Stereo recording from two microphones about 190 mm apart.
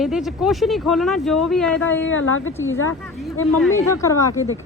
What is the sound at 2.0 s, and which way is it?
Speech, 90° left.